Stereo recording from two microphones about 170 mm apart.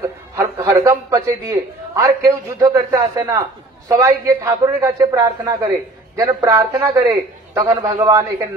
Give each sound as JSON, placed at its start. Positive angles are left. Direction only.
{"t": 0.0, "sound": "a man's voice", "side_deg": -15}